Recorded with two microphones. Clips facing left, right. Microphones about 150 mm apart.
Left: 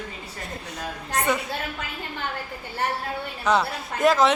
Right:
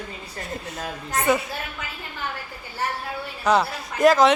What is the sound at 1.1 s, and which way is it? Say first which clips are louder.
Speech: right 3 dB; 5° right (ahead or behind).